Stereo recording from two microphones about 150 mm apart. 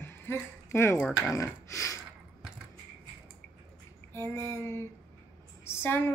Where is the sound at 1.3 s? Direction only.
20° left (ahead or behind).